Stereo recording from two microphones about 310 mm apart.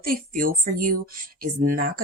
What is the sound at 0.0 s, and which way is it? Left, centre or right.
Speech, right.